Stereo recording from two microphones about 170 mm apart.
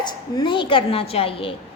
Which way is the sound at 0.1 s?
25° left (ahead or behind).